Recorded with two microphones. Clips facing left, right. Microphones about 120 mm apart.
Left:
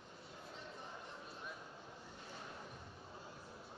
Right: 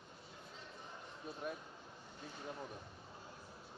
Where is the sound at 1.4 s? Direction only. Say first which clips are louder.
Right 10 dB; 60° right (ahead or behind).